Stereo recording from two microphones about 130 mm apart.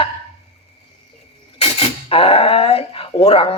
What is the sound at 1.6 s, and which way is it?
Speech, 45° left (ahead or behind).